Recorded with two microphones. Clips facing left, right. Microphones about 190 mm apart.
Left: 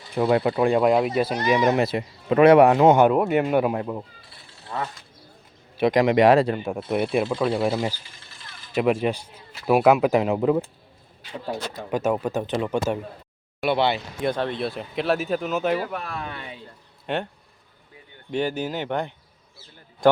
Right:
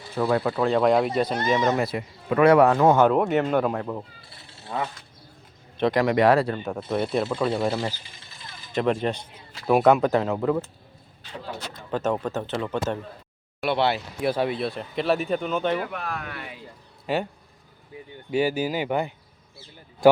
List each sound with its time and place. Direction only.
0.1 s speech: 20° left (ahead or behind)
0.8 s speech: 5° left (ahead or behind)
3.1 s speech: 5° left (ahead or behind)
5.7 s speech: 15° left (ahead or behind)
6.7 s speech: 10° left (ahead or behind)
11.7 s speech: 10° left (ahead or behind)
13.6 s speech: centre (ahead or behind)
15.8 s speech: 35° left (ahead or behind)
17.1 s speech: 5° right (ahead or behind)
18.3 s speech: 5° right (ahead or behind)